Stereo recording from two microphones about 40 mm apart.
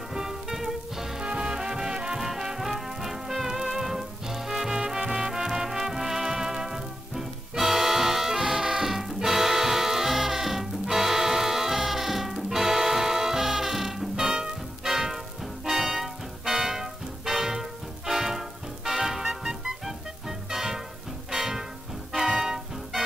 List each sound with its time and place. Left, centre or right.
0.1 s music: centre
1.2 s music: right